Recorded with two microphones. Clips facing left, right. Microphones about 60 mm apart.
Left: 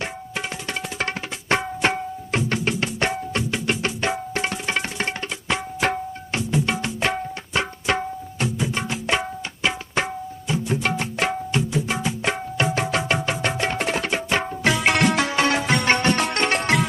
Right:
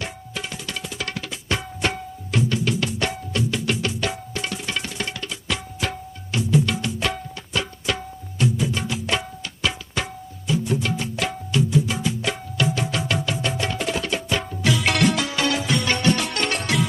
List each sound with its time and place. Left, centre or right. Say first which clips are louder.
0.9 s music: left 3 dB; left
10.5 s music: even; left
15.0 s music: left 2 dB; left